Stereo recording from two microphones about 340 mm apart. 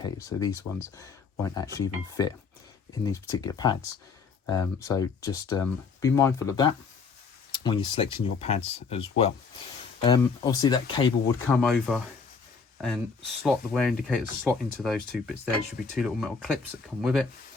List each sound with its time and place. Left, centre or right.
0.0 s speech: centre
11.5 s speech: centre
13.4 s speech: centre